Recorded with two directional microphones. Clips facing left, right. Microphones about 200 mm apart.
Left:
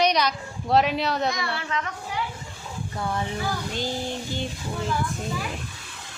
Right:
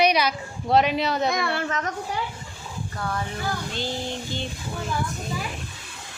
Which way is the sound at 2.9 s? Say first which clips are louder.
Left 1 dB; 20° left (ahead or behind).